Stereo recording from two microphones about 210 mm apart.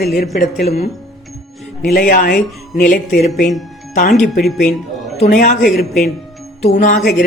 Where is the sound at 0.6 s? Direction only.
50° left (ahead or behind).